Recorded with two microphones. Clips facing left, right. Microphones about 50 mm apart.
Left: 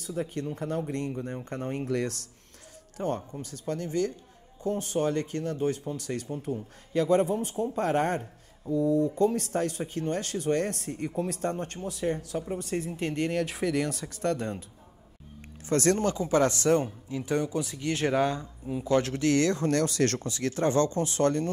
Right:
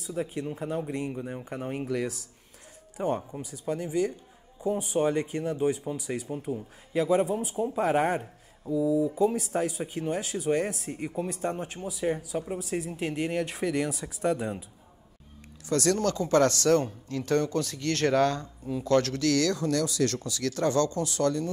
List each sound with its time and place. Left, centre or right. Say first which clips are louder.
0.1 s speech: even; centre
15.6 s speech: left 1 dB; left
16.1 s speech: right 1 dB; centre; by 21.5 s left